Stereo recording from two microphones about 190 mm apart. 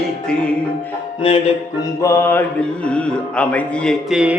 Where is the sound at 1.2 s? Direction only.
30° left (ahead or behind).